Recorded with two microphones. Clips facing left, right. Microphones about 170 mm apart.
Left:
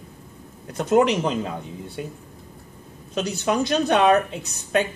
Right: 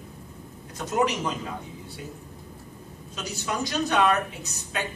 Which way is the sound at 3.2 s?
60° left (ahead or behind).